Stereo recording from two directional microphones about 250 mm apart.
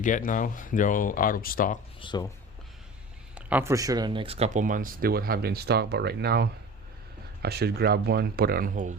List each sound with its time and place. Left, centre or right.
0.0 s speech: left
2.0 s speech: centre
3.3 s speech: centre; by 9.0 s right